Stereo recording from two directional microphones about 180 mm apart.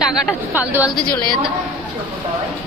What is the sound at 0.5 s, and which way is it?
Speech, 10° right (ahead or behind).